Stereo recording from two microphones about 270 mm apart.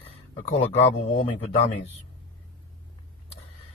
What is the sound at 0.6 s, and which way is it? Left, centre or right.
A man's voice, left.